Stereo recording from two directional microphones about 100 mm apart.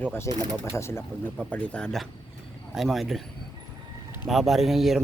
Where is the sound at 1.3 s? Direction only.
15° left (ahead or behind).